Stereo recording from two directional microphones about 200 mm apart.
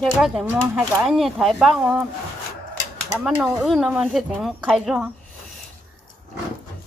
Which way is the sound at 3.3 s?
5° right (ahead or behind).